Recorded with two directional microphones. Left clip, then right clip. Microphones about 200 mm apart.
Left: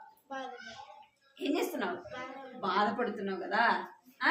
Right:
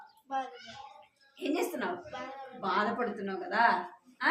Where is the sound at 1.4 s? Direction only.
5° right (ahead or behind).